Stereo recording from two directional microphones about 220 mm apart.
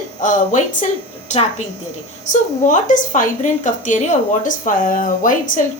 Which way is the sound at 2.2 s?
35° left (ahead or behind).